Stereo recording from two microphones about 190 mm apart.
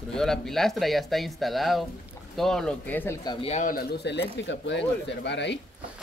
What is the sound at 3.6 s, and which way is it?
Speech, 50° left (ahead or behind).